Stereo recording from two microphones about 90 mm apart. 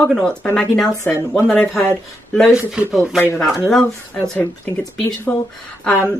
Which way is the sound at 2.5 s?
10° right (ahead or behind).